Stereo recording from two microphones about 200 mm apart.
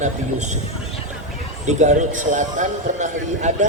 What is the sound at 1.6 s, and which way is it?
Speech, 35° right (ahead or behind).